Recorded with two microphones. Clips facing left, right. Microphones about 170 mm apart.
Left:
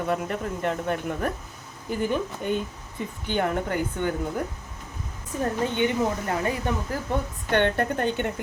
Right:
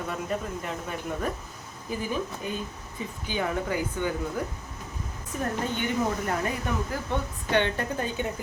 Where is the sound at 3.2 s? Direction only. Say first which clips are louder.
Left 3 dB; 60° left (ahead or behind).